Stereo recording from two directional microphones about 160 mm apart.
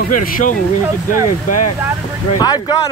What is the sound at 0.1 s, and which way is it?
Speech, 60° left (ahead or behind).